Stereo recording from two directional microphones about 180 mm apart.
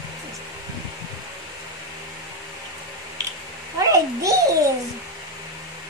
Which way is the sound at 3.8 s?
20° right (ahead or behind).